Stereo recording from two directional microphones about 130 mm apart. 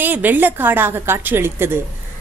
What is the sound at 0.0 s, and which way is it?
Speech, 15° right (ahead or behind).